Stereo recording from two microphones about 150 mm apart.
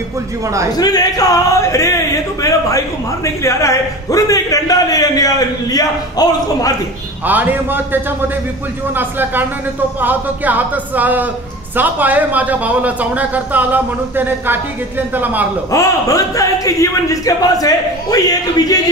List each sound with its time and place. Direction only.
0.7 s a man's voice: 25° left (ahead or behind)
3.4 s a man's voice: 20° left (ahead or behind)
7.2 s speech: 10° right (ahead or behind)
15.7 s a man's voice: 20° left (ahead or behind)